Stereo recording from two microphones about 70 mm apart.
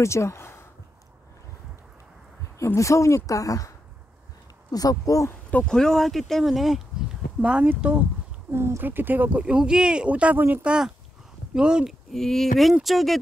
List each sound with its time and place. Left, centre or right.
0.0 s speech: left
2.6 s speech: left
5.7 s speech: centre
7.4 s speech: centre
8.5 s speech: right; by 11.9 s centre
12.1 s speech: centre